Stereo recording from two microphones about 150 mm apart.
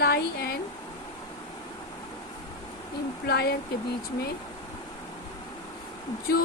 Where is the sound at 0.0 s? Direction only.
90° left.